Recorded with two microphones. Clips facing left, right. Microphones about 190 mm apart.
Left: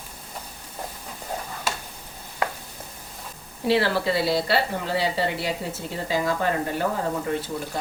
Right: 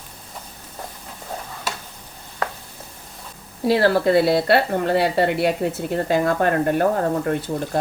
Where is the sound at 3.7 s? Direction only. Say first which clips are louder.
Right 6 dB; 50° right (ahead or behind).